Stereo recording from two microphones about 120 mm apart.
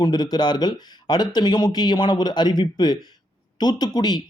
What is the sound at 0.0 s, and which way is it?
Speech, 35° left (ahead or behind).